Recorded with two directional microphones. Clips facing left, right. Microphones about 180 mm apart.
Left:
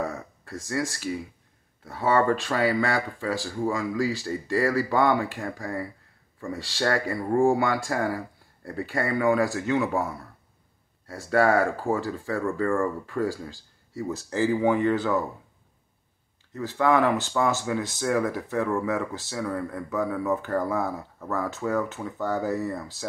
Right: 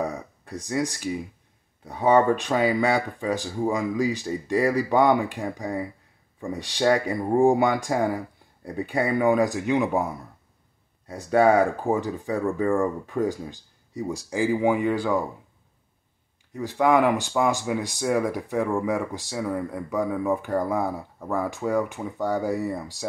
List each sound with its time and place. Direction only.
0.0 s a sound: 15° right (ahead or behind)
1.9 s speech: 20° right (ahead or behind)
16.5 s speech: 15° right (ahead or behind)